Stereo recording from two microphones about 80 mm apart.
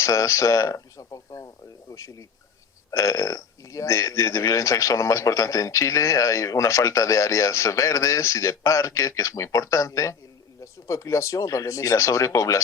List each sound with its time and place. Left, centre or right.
0.0 s speech: left